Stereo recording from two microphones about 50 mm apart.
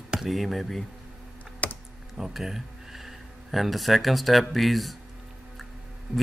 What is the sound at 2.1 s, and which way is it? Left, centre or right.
Speech, centre.